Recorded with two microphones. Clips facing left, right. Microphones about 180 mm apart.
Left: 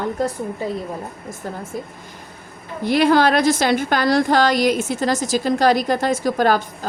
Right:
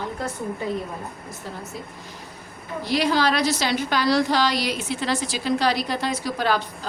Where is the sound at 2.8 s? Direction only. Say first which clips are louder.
Left 6 dB; 55° left (ahead or behind).